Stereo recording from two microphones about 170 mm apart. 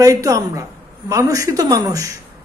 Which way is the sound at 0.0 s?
20° right (ahead or behind).